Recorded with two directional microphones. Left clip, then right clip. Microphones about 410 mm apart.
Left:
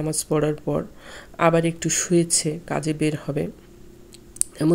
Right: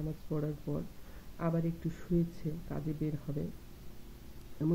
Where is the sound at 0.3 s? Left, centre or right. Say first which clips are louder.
Left 16 dB; left.